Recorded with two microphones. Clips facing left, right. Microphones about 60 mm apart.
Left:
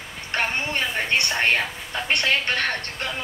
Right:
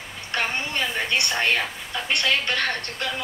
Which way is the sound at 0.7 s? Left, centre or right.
Left.